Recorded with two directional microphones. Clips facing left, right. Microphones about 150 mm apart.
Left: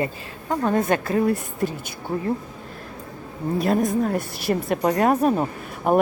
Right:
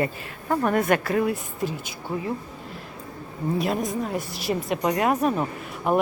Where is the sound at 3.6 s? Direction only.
45° left (ahead or behind).